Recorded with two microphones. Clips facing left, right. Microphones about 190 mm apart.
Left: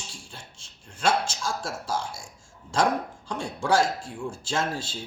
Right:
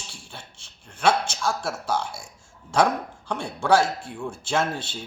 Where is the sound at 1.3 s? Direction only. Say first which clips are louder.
Right 4 dB; 65° right (ahead or behind).